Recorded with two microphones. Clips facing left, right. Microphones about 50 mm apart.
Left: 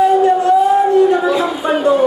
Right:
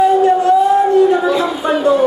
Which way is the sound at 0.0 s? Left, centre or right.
Centre.